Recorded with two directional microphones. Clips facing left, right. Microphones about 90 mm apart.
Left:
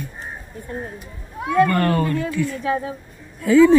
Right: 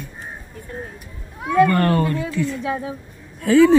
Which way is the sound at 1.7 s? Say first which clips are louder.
Right 1 dB; 35° right (ahead or behind).